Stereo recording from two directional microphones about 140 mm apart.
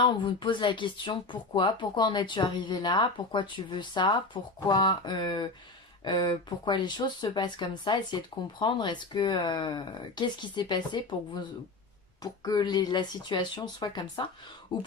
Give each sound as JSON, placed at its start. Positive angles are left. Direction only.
{"t": 0.0, "sound": "speech", "side_deg": 35}